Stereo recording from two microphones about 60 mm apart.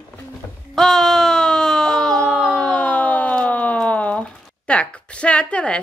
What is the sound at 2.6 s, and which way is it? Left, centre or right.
Siren, left.